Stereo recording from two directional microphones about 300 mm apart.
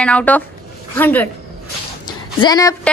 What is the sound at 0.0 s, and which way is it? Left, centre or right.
Speech, centre.